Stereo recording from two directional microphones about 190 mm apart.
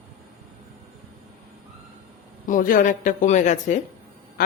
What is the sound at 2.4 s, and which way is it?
A woman's voice, 45° left (ahead or behind).